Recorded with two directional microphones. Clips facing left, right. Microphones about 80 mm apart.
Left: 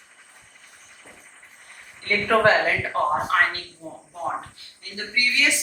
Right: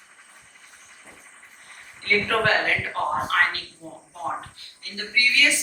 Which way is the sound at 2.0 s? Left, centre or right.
Centre.